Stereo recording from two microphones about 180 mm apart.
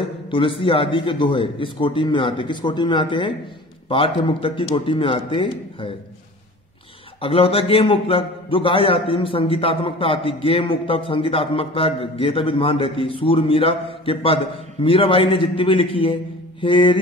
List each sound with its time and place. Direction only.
0.0 s a man's voice: 30° left (ahead or behind)
7.2 s a man's voice: 30° left (ahead or behind)